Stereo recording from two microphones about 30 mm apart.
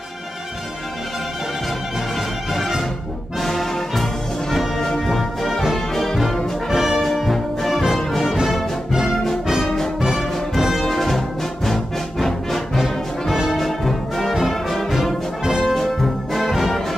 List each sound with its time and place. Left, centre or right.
3.3 s music: centre
6.7 s brass instrument: centre
7.0 s music: centre
10.8 s brass instrument: centre
12.7 s brass instrument: centre
13.5 s brass instrument: centre
15.6 s music: centre